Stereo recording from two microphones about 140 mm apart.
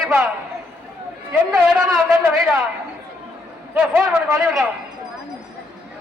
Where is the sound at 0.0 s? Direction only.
Centre (ahead or behind).